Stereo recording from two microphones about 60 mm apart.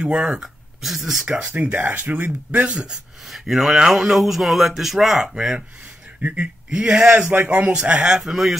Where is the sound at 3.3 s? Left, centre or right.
Centre.